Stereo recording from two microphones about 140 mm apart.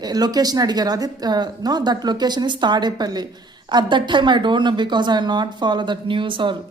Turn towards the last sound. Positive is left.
turn(degrees=-35)  # may be behind; listen again after turning